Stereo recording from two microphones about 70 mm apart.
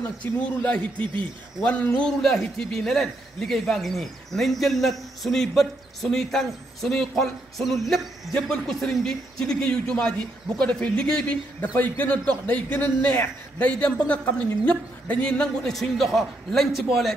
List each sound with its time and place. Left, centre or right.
0.2 s a man's voice: centre
2.0 s speech: centre
11.7 s a man's voice: left; by 17.1 s centre